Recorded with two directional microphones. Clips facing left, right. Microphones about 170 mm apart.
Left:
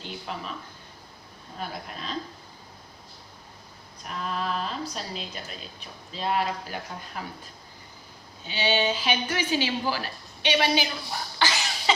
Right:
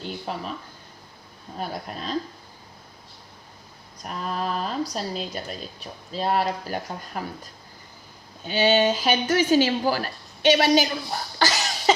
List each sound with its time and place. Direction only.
0.0 s speech: 40° right (ahead or behind)
1.5 s speech: 40° right (ahead or behind)
4.1 s speech: 40° right (ahead or behind)
8.4 s a woman's voice: 45° right (ahead or behind)
11.3 s cough: 40° right (ahead or behind)